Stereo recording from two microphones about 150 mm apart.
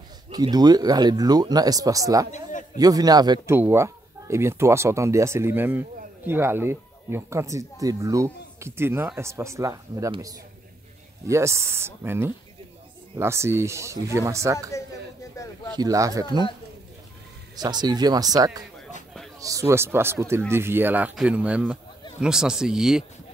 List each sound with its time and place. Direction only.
0.3 s speech: 25° right (ahead or behind)
2.3 s a sound: 55° left (ahead or behind)
2.8 s speech: 25° right (ahead or behind)
3.5 s speech: 15° right (ahead or behind)
11.2 s speech: 20° right (ahead or behind)
15.3 s speech: 20° left (ahead or behind)
15.8 s speech: 25° right (ahead or behind)
17.6 s speech: 25° right (ahead or behind); by 23.0 s 5° right (ahead or behind)